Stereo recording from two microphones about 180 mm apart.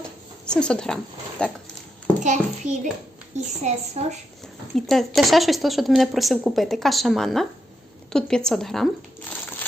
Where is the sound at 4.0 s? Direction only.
35° right (ahead or behind).